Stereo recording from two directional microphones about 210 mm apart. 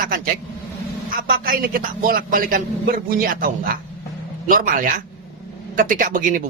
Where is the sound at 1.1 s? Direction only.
40° right (ahead or behind).